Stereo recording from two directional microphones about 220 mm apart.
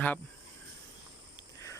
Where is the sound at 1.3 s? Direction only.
15° left (ahead or behind).